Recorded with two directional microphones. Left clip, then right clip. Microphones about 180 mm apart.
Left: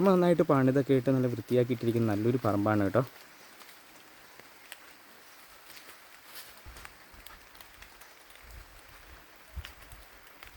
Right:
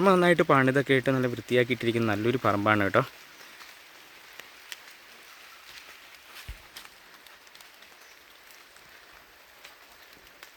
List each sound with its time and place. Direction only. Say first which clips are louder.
0.0 s speech: right 4 dB; centre (ahead or behind)
2.4 s speech: right 4 dB; 20° right (ahead or behind)
2.6 s speech: right 6 dB; 5° right (ahead or behind)